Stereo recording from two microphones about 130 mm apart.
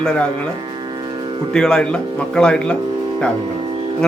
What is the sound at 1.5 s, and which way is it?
Speech, 5° left (ahead or behind).